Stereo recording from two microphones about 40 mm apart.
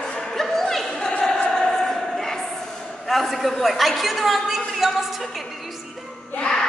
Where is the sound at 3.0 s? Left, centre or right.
Centre.